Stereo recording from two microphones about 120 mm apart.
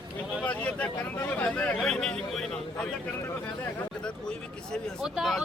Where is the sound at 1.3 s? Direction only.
15° left (ahead or behind).